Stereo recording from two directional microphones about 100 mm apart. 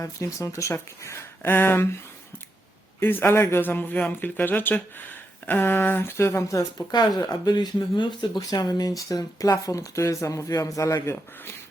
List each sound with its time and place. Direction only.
0.0 s speech: 30° left (ahead or behind)
3.0 s speech: 20° left (ahead or behind)
7.2 s speech: 45° left (ahead or behind); by 11.5 s 25° left (ahead or behind)